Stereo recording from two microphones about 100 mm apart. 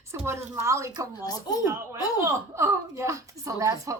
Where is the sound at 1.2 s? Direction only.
40° left (ahead or behind).